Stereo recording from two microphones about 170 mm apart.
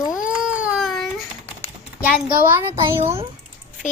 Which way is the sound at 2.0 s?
10° right (ahead or behind).